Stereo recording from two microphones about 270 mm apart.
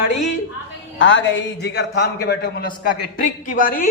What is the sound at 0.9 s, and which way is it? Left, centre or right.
A man's voice, left.